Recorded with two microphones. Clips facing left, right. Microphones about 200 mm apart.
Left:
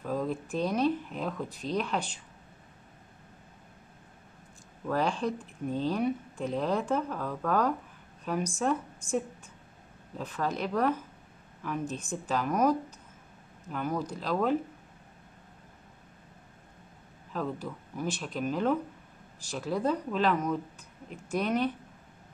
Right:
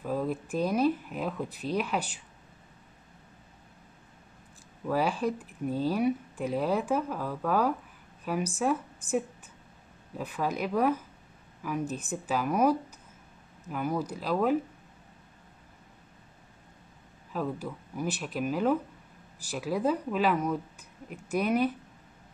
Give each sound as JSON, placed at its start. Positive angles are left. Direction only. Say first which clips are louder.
{"t": 0.0, "sound": "speech", "louder": "right 1 dB", "side_deg": -5}
{"t": 4.8, "sound": "speech", "louder": "right 1 dB", "side_deg": -10}
{"t": 17.3, "sound": "speech", "louder": "right 1 dB", "side_deg": -10}